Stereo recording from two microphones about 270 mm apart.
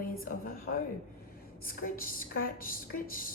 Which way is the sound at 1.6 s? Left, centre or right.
Left.